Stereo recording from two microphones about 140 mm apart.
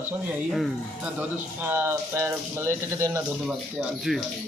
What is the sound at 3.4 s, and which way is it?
Speech, centre (ahead or behind).